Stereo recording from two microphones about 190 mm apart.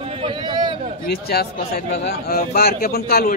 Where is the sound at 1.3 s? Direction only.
55° left (ahead or behind).